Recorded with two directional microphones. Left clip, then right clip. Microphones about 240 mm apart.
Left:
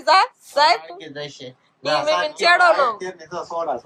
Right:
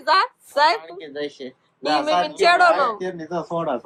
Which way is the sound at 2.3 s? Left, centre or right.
Centre.